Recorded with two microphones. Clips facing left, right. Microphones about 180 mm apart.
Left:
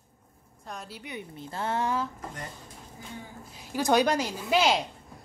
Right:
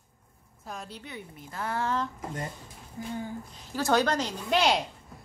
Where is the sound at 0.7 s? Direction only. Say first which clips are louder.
Right 1 dB; centre (ahead or behind).